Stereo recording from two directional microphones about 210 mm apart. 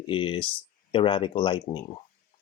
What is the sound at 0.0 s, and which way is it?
Speech, 25° left (ahead or behind).